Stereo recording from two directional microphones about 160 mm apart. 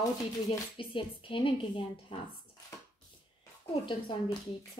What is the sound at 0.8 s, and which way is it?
Speech, 30° left (ahead or behind).